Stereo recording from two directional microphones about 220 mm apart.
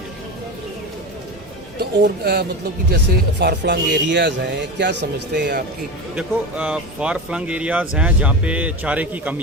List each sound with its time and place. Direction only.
1.8 s speech: 45° right (ahead or behind)
6.1 s speech: 5° right (ahead or behind)